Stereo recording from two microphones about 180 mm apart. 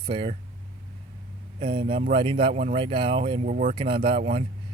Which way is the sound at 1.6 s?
30° right (ahead or behind).